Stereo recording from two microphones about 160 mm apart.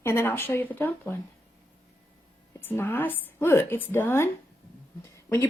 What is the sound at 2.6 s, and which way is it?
A woman's voice, 15° left (ahead or behind).